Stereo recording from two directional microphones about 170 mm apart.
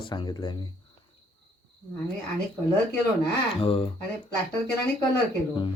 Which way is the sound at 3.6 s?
35° left (ahead or behind).